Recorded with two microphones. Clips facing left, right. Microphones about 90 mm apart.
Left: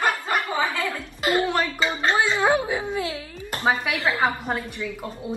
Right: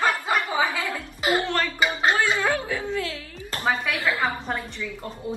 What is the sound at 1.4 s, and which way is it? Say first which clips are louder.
Speech: left 1 dB; 10° left (ahead or behind).